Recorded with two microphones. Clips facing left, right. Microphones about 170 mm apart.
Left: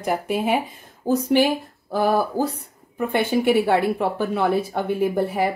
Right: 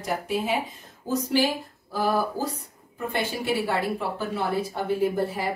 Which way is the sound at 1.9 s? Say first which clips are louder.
Left 5 dB; 60° left (ahead or behind).